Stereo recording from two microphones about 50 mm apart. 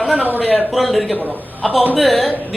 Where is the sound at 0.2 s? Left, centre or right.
Right.